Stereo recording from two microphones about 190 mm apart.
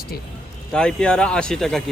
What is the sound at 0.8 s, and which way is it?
Speech, 5° left (ahead or behind).